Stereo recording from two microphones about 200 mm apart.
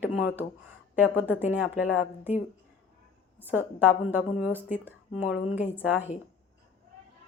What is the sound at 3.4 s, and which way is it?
Speech, 10° right (ahead or behind).